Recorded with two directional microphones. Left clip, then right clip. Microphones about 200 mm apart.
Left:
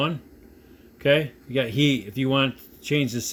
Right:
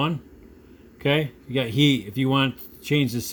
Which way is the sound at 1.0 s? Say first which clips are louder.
Left 3 dB; 15° right (ahead or behind).